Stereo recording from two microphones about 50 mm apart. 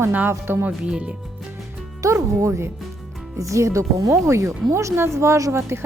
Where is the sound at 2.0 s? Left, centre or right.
Right.